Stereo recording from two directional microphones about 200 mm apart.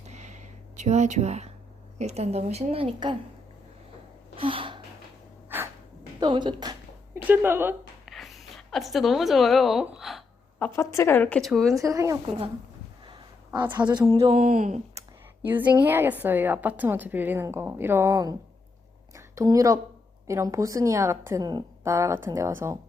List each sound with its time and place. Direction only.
0.1 s a sound: 35° right (ahead or behind)
2.0 s a woman's voice: 35° right (ahead or behind)
4.4 s gasp: 25° right (ahead or behind)
6.1 s a sound: 25° right (ahead or behind); by 10.7 s centre (ahead or behind)
10.8 s a woman's voice: 15° left (ahead or behind)
11.7 s a woman's voice: 15° right (ahead or behind)
13.1 s a sound: 20° right (ahead or behind)
13.7 s speech: 20° right (ahead or behind)
14.3 s a woman's voice: 35° right (ahead or behind)
15.4 s a woman's voice: 10° right (ahead or behind)